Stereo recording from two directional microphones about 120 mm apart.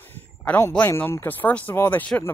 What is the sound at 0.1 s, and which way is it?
Speech, 20° left (ahead or behind).